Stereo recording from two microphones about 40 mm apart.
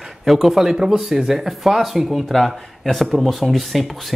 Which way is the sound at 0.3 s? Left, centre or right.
Centre.